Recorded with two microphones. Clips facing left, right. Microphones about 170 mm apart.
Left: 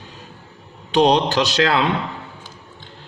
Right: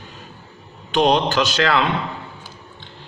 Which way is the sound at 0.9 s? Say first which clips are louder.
Left 1 dB; 35° left (ahead or behind).